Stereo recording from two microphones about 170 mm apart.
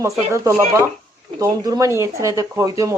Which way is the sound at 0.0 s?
15° right (ahead or behind).